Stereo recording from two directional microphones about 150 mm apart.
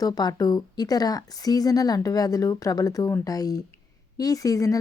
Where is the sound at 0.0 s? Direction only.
25° left (ahead or behind).